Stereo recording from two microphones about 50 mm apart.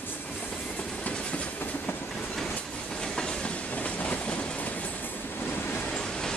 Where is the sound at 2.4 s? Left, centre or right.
Centre.